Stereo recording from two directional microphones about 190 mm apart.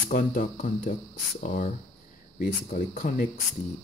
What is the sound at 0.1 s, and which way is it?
Speech, 45° left (ahead or behind).